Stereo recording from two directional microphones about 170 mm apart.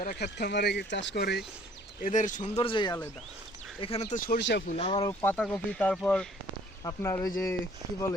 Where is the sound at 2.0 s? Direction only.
50° left (ahead or behind).